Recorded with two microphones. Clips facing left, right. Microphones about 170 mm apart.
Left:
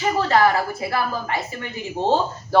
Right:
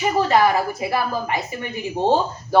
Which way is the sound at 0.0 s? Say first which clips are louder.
Right 1 dB; 15° right (ahead or behind).